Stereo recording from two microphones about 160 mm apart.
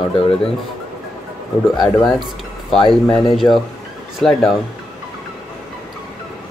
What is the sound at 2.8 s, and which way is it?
Speech, 30° left (ahead or behind).